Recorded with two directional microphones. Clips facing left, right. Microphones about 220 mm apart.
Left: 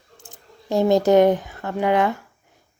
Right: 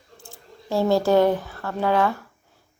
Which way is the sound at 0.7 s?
20° left (ahead or behind).